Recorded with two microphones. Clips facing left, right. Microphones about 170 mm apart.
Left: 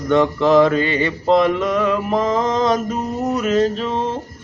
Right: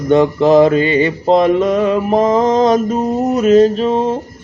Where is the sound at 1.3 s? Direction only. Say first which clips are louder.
Right 3 dB; 45° right (ahead or behind).